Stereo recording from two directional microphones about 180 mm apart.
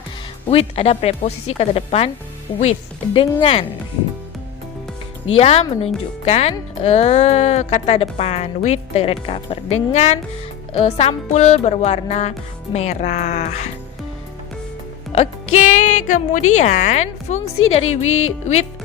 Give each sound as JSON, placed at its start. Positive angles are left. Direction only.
{"t": 0.4, "sound": "speech", "side_deg": 35}
{"t": 5.4, "sound": "speech", "side_deg": 35}
{"t": 15.1, "sound": "speech", "side_deg": 40}